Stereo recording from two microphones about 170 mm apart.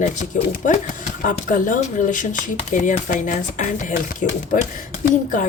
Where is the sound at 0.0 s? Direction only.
45° left (ahead or behind).